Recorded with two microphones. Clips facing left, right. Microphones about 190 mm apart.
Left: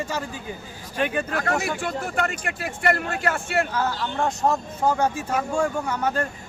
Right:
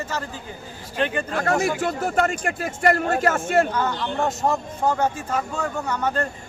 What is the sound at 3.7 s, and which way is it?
Speech, 5° left (ahead or behind).